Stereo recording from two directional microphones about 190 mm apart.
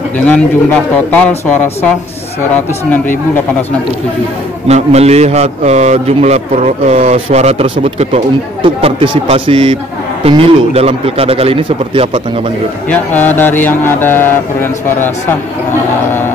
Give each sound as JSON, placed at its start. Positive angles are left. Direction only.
{"t": 0.3, "sound": "speech", "side_deg": 10}
{"t": 4.6, "sound": "a man's voice", "side_deg": -35}
{"t": 12.9, "sound": "speech", "side_deg": 10}